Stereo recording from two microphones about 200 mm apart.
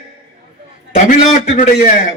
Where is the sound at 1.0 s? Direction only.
35° left (ahead or behind).